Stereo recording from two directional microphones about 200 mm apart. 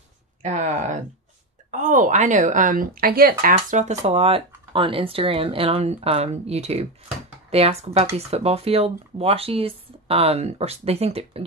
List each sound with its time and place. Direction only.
0.4 s a woman's voice: 40° right (ahead or behind)